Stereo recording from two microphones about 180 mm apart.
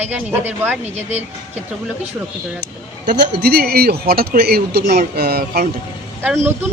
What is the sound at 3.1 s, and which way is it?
Speech, 60° right (ahead or behind).